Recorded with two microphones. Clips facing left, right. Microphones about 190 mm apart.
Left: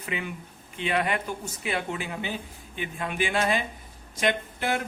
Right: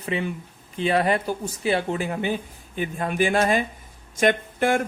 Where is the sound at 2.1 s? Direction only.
50° right (ahead or behind).